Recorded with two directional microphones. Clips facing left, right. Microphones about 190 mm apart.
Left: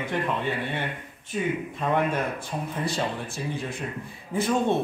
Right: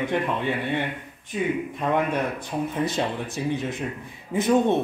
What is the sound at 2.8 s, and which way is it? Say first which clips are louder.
Speech: right 2 dB; 20° right (ahead or behind).